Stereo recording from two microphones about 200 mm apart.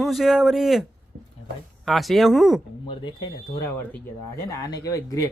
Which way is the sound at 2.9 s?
25° left (ahead or behind).